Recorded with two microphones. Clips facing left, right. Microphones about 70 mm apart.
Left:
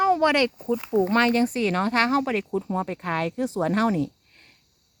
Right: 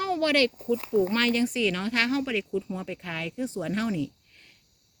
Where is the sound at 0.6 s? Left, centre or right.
Left.